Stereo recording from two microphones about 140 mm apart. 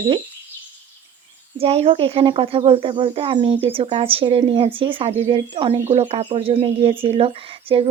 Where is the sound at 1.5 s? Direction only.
45° right (ahead or behind).